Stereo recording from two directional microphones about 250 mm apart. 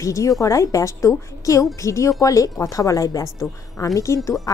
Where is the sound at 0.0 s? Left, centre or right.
Centre.